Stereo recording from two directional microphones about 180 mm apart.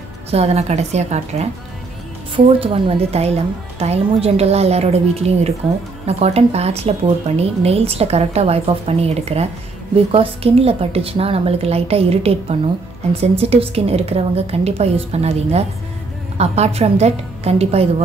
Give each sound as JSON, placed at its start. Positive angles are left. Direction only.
{"t": 0.3, "sound": "speech", "side_deg": -35}